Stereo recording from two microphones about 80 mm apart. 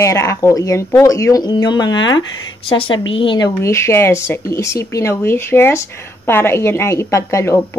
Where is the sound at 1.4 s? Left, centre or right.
Left.